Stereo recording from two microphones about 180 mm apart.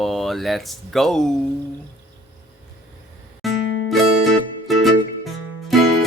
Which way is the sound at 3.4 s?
Centre (ahead or behind).